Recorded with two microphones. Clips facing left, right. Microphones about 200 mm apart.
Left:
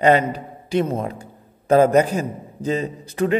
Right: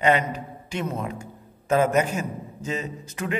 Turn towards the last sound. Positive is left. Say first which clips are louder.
# left 9 dB
turn(degrees=35)  # may be behind; listen again after turning